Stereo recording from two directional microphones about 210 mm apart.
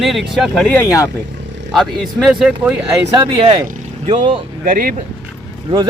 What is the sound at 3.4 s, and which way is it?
Speech, 25° right (ahead or behind).